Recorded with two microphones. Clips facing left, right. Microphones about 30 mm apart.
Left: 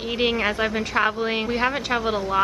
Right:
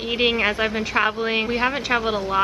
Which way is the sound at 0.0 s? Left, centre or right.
Centre.